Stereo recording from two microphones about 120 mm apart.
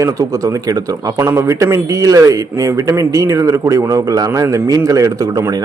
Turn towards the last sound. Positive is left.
turn(degrees=-30)  # may be behind; listen again after turning